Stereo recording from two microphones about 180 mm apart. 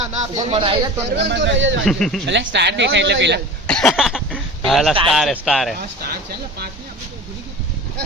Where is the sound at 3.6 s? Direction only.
5° left (ahead or behind).